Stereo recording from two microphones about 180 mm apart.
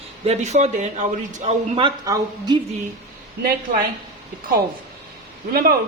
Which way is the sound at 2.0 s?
20° right (ahead or behind).